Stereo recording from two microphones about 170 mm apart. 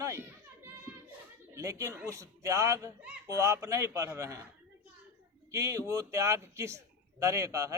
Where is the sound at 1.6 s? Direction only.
20° right (ahead or behind).